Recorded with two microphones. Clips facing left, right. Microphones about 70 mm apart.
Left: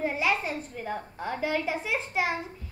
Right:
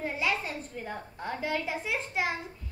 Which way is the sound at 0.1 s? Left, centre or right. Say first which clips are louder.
Left 3 dB; left.